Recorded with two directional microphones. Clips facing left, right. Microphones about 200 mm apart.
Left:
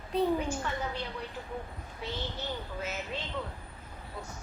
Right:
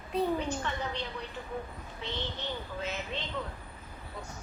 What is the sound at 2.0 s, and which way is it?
Speech, 5° left (ahead or behind).